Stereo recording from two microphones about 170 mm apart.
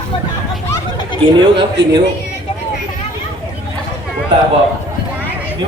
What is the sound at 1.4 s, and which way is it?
Speech, 25° right (ahead or behind).